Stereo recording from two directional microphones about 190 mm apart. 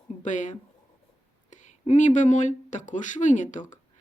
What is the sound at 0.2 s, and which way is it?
Speech, 40° left (ahead or behind).